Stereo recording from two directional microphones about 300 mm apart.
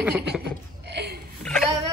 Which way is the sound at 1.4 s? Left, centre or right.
Centre.